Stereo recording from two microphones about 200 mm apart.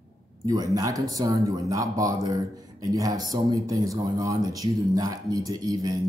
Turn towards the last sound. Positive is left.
turn(degrees=-20)  # may be behind; listen again after turning